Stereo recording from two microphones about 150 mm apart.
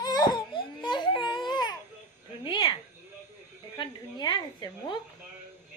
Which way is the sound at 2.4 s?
30° left (ahead or behind).